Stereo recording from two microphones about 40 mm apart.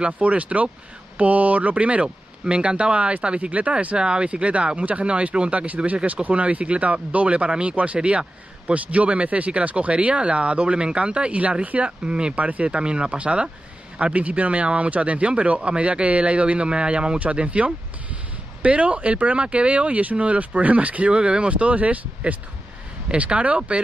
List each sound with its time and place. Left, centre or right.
0.0 s speech: right
12.0 s speech: right